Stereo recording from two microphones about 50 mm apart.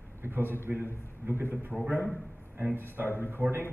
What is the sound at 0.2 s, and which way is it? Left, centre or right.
A man's voice, right.